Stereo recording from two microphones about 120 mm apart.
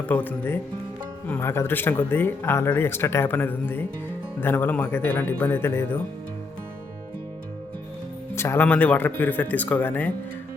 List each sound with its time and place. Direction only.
0.1 s speech: 15° left (ahead or behind)
8.4 s speech: 20° left (ahead or behind)